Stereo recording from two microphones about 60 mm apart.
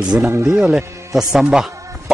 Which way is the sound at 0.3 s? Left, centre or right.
Right.